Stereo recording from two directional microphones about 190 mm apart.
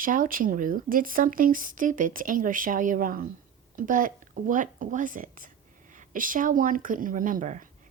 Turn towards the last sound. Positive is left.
turn(degrees=-45)  # may be behind; listen again after turning